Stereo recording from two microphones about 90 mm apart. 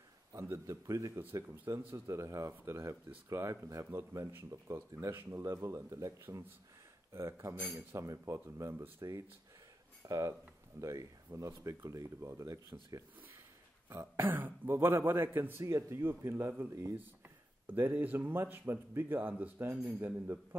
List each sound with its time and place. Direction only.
0.3 s a man's voice: 35° right (ahead or behind)
5.3 s speech: 35° right (ahead or behind)
10.0 s speech: 35° right (ahead or behind)
13.8 s a man's voice: 30° right (ahead or behind)